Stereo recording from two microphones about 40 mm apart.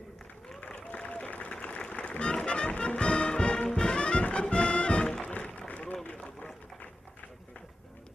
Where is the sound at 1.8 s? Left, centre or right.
Left.